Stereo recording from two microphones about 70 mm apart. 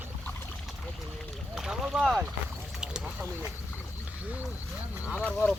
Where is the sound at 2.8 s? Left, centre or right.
Centre.